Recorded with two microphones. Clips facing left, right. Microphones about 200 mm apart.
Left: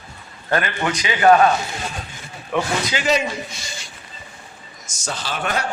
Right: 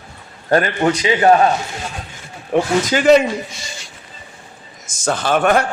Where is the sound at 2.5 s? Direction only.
45° right (ahead or behind).